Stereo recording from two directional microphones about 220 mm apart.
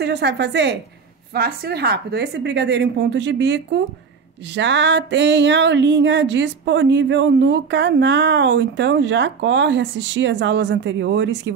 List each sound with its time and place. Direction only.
0.0 s a woman's voice: 50° right (ahead or behind)
4.6 s music: 55° right (ahead or behind)